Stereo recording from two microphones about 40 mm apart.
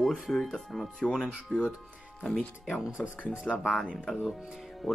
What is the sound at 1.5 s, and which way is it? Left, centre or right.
Speech, left.